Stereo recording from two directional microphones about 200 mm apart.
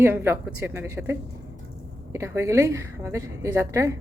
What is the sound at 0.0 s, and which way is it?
A woman's voice, 10° right (ahead or behind).